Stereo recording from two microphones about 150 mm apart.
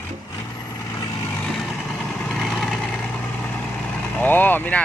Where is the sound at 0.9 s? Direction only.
20° left (ahead or behind).